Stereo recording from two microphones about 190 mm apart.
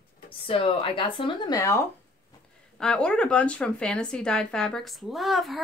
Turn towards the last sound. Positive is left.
turn(degrees=0)  # may be behind; listen again after turning